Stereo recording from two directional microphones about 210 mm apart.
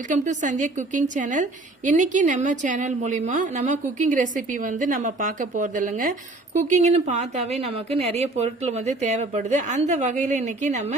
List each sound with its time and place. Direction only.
0.1 s a woman's voice: 35° right (ahead or behind)